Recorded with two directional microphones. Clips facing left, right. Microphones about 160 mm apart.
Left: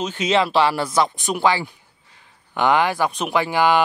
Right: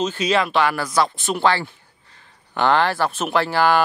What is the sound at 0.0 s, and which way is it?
Speech, 15° left (ahead or behind).